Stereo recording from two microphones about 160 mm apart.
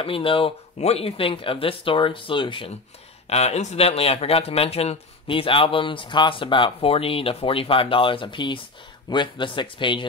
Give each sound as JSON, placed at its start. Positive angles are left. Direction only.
{"t": 0.0, "sound": "speech", "side_deg": 35}
{"t": 3.3, "sound": "speech", "side_deg": 40}